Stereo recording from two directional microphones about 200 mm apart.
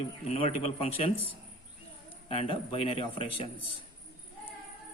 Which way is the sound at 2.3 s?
30° left (ahead or behind).